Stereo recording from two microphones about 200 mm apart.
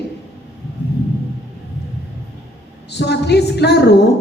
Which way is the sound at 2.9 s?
55° left (ahead or behind).